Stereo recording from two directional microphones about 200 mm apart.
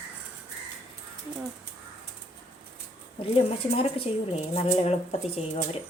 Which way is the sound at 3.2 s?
30° left (ahead or behind).